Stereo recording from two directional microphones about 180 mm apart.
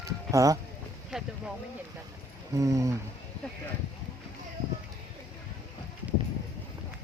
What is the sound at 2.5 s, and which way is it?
Speech, 20° right (ahead or behind).